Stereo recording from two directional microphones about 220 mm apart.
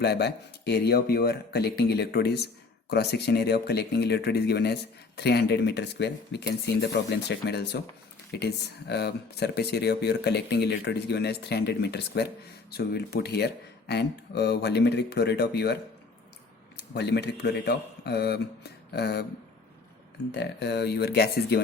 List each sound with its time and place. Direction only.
0.0 s a man's voice: 50° left (ahead or behind)
20.3 s speech: 50° left (ahead or behind)